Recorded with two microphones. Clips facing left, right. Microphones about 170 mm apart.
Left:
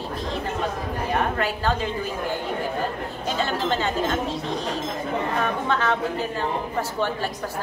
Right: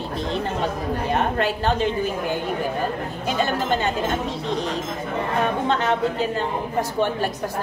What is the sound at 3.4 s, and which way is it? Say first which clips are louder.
Speech: right 2 dB; 15° right (ahead or behind).